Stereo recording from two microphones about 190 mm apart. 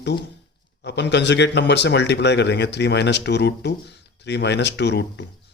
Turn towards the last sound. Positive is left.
turn(degrees=65)  # may be behind; listen again after turning